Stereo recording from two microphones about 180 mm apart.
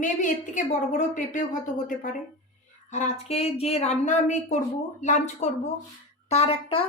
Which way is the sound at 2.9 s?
40° left (ahead or behind).